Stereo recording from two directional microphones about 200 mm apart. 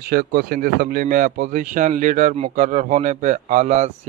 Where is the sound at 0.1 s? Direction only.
50° right (ahead or behind).